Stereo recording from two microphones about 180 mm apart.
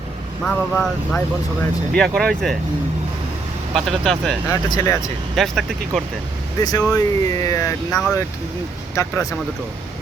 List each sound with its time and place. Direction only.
0.4 s speech: centre (ahead or behind)
3.8 s speech: centre (ahead or behind)
4.4 s speech: 20° left (ahead or behind)
5.4 s speech: centre (ahead or behind)
6.6 s speech: 20° left (ahead or behind)